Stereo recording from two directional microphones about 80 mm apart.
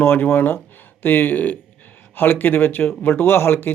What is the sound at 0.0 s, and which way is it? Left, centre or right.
Speech, left.